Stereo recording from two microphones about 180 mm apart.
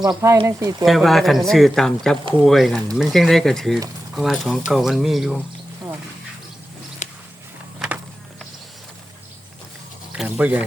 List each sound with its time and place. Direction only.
0.0 s speech: 20° right (ahead or behind)
0.9 s speech: centre (ahead or behind)
7.0 s walk: 40° left (ahead or behind)
10.2 s a sound: 5° right (ahead or behind)